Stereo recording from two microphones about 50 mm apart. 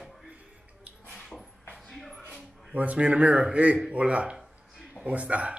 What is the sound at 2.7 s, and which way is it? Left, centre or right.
Speech, right.